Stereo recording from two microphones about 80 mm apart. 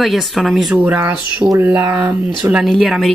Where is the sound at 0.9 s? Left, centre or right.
Right.